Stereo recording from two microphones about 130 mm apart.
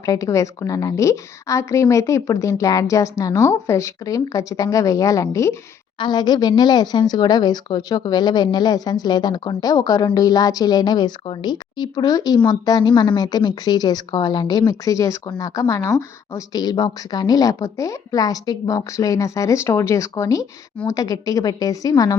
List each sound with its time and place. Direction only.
0.0 s speech: 25° left (ahead or behind)
6.0 s a woman's voice: 35° left (ahead or behind)